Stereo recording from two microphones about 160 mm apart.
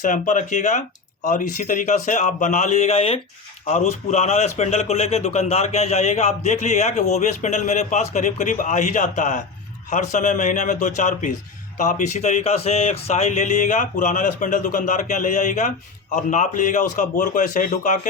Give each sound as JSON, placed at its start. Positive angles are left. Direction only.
{"t": 0.0, "sound": "speech", "side_deg": 55}